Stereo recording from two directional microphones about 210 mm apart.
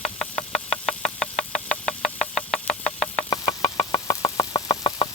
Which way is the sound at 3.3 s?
15° left (ahead or behind).